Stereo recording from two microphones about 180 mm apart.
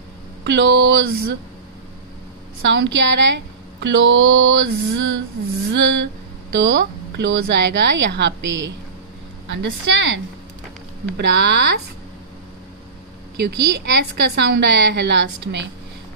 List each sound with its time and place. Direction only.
0.4 s speech: 85° right
2.7 s a woman's voice: 90° right
11.1 s a woman's voice: 70° right (ahead or behind)
13.4 s a woman's voice: 65° right (ahead or behind); by 15.7 s 85° right